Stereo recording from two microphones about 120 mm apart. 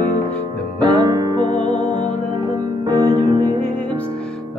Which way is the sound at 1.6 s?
85° left.